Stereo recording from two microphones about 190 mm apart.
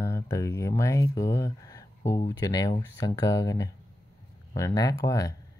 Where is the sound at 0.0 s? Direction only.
15° left (ahead or behind).